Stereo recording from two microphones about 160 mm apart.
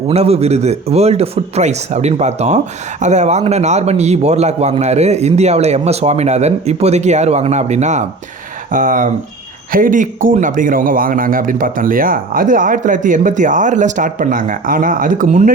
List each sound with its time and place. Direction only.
0.1 s a man's voice: 40° right (ahead or behind)